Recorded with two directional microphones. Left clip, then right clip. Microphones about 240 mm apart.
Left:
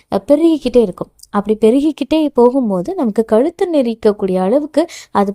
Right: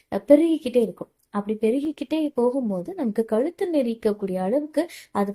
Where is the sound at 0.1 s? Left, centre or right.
Left.